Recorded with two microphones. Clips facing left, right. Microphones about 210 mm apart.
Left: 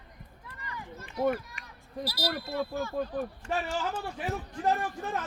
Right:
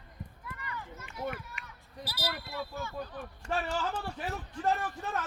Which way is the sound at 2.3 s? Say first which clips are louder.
Left 7 dB; 40° left (ahead or behind).